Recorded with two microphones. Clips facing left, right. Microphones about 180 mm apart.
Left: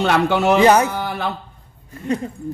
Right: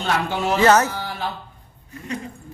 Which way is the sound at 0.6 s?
15° left (ahead or behind).